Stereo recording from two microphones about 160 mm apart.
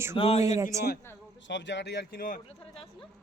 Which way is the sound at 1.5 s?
90° left.